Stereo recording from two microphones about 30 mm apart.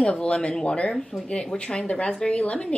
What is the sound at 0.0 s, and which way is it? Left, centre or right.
Speech, left.